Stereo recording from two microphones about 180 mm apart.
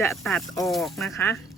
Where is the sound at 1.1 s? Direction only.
15° left (ahead or behind).